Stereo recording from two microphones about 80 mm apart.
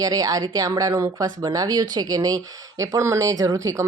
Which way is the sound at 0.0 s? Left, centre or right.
Right.